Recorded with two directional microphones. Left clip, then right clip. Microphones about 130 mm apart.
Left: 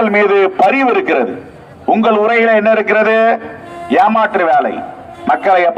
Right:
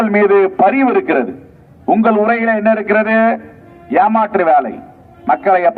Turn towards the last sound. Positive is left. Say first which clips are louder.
# left 1 dB
turn(degrees=35)  # may be behind; listen again after turning